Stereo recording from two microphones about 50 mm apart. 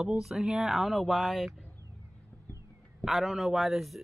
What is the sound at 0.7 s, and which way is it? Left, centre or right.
Speech, centre.